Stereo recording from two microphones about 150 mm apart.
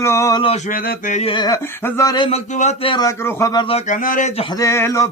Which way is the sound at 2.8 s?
35° left (ahead or behind).